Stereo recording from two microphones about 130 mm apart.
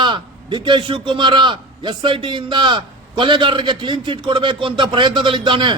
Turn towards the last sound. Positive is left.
turn(degrees=-40)  # may be behind; listen again after turning